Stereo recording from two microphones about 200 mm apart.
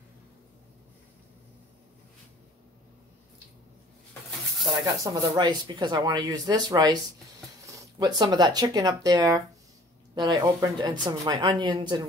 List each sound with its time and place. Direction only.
5.0 s speech: 20° right (ahead or behind)